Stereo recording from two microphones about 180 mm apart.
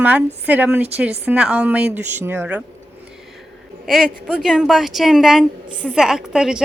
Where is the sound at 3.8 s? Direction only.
Centre (ahead or behind).